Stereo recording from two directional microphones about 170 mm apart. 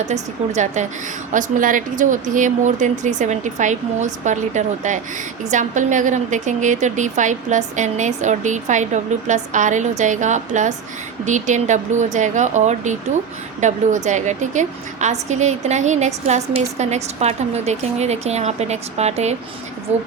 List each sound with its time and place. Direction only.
0.0 s a woman's voice: 40° right (ahead or behind)